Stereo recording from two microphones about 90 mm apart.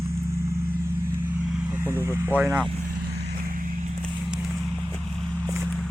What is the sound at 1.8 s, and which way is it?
Vehicle, 25° right (ahead or behind).